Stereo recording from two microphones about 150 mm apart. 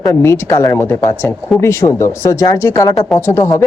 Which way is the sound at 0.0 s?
20° left (ahead or behind).